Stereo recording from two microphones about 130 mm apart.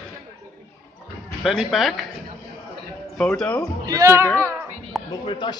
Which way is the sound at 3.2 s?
5° left (ahead or behind).